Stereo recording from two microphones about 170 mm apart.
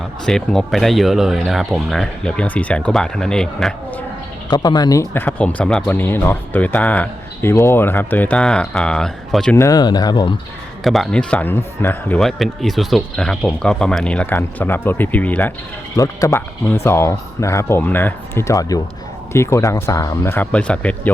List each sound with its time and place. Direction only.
0.3 s speech: centre (ahead or behind)
4.4 s speech: 25° left (ahead or behind); by 9.6 s 5° left (ahead or behind)
9.6 s speech: 20° left (ahead or behind)
10.8 s speech: centre (ahead or behind)